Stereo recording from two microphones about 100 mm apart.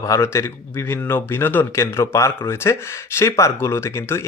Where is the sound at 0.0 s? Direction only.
30° left (ahead or behind).